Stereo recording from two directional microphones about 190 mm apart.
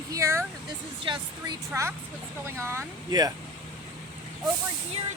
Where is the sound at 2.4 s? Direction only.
15° right (ahead or behind).